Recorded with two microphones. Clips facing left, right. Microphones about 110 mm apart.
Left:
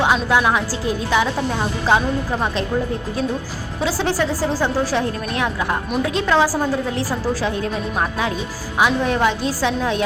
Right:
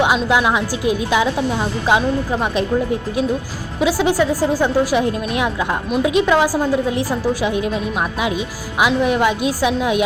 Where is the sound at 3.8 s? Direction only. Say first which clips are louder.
Right 4 dB; 15° right (ahead or behind).